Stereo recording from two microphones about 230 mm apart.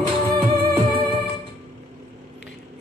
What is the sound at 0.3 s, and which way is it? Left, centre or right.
Music, right.